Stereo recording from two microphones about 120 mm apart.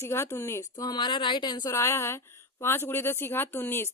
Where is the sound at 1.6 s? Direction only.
25° left (ahead or behind).